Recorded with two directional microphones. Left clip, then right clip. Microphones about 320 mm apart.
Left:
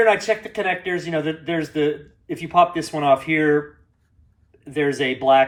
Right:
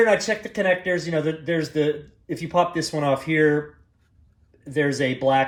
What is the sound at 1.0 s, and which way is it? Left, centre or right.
Speech, right.